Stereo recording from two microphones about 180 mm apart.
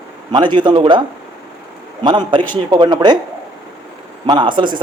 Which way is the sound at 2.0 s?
25° right (ahead or behind).